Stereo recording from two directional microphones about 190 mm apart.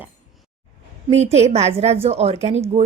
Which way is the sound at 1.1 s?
35° right (ahead or behind).